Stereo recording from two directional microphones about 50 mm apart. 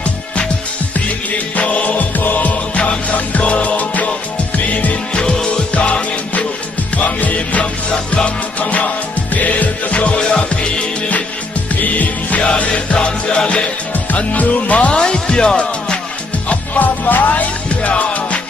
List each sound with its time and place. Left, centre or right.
0.9 s music: left
5.1 s music: centre
13.9 s speech: left
15.0 s music: centre
16.4 s music: left